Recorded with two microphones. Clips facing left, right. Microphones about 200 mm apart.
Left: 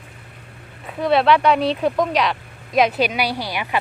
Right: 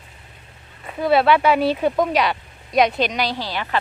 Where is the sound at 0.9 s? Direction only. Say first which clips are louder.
Even; centre (ahead or behind).